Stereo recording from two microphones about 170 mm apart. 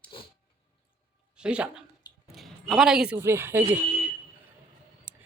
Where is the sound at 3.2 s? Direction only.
15° right (ahead or behind).